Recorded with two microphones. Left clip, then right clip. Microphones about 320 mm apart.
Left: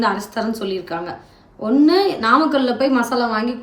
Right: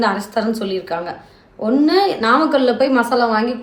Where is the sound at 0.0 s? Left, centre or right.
Centre.